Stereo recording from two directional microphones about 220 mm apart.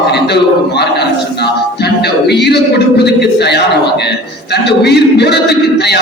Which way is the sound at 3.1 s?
50° left (ahead or behind).